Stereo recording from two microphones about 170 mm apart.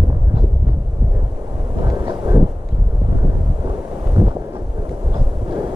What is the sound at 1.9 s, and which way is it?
Vehicle, 20° right (ahead or behind).